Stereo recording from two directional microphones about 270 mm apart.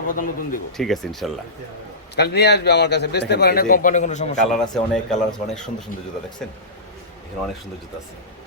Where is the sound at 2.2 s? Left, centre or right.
Left.